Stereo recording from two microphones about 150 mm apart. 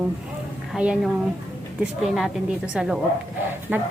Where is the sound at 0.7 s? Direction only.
5° right (ahead or behind).